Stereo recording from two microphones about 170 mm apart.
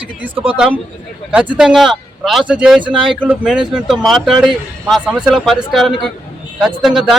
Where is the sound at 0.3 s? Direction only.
35° right (ahead or behind).